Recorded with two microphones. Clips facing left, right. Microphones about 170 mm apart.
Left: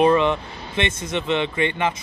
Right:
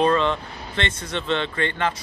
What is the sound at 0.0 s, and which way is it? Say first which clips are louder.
Speech: left 3 dB; 15° left (ahead or behind).